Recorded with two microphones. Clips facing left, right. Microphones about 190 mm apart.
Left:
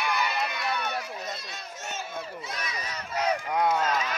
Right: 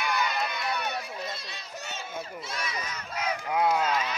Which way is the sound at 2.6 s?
40° left (ahead or behind).